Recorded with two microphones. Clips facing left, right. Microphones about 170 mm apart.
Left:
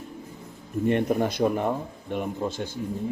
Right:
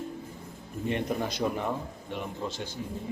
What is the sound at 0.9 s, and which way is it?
A man's voice, 55° left (ahead or behind).